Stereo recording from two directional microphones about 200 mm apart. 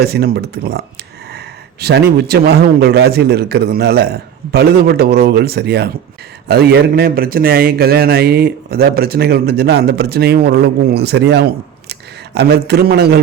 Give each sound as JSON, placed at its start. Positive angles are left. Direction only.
{"t": 0.0, "sound": "a man's voice", "side_deg": -50}
{"t": 2.1, "sound": "a man's voice", "side_deg": -55}